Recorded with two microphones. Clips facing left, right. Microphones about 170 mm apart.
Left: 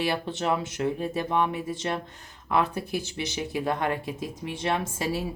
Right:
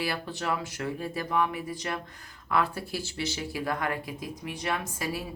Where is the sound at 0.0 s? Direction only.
25° left (ahead or behind).